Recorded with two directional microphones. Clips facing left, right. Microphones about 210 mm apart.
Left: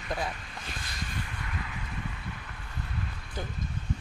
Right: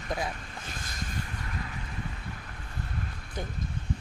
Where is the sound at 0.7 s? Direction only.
45° right (ahead or behind).